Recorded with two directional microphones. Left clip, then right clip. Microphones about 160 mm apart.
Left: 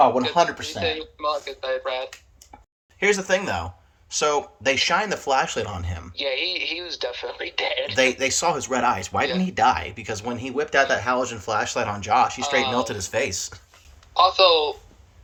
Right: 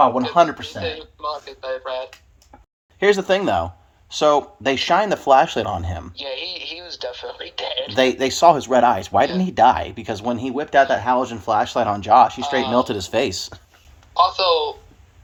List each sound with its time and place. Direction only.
0.8 s speech: 15° left (ahead or behind)
3.0 s speech: 35° right (ahead or behind)
6.1 s speech: 15° left (ahead or behind)
7.9 s speech: 30° right (ahead or behind)
12.4 s speech: 15° left (ahead or behind)
12.7 s speech: 40° right (ahead or behind)
14.1 s speech: 15° left (ahead or behind)